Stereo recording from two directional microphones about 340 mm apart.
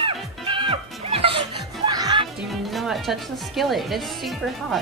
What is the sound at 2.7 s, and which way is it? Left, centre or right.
Speech, centre.